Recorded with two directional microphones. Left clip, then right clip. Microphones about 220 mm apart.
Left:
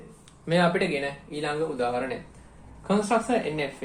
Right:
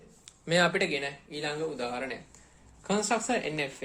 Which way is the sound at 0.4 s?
40° right (ahead or behind).